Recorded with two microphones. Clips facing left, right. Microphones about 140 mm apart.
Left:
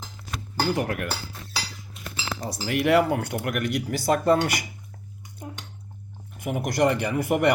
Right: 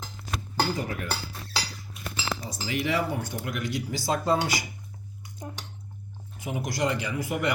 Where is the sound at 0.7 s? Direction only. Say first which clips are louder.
Left 5 dB; 65° left (ahead or behind).